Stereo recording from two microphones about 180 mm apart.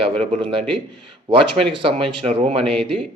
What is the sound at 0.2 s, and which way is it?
A man's voice, 30° right (ahead or behind).